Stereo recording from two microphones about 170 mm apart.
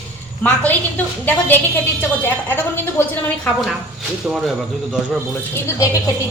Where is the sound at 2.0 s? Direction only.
10° left (ahead or behind).